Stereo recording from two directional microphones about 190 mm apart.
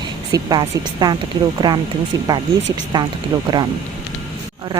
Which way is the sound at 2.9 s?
25° right (ahead or behind).